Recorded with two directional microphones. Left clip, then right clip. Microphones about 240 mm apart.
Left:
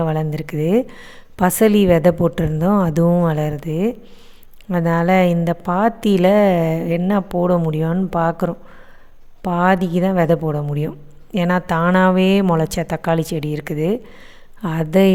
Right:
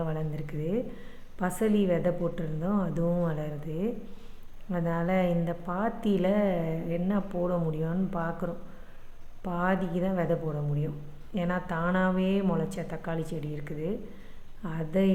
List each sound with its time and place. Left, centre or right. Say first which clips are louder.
0.0 s a woman's voice: left 13 dB; left